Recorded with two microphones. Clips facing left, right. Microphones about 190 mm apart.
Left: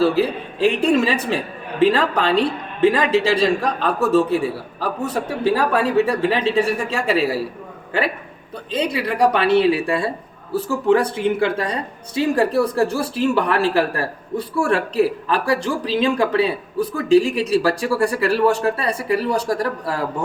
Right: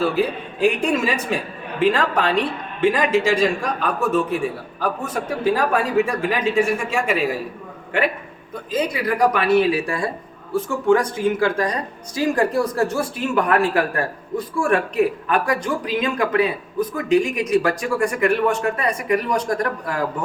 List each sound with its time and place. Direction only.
0.0 s speech: 35° left (ahead or behind)
8.7 s speech: 30° left (ahead or behind)
11.3 s speech: 25° left (ahead or behind)